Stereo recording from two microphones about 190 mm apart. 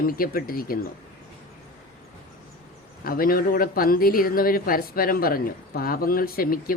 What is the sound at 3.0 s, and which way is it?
Speech, 50° left (ahead or behind).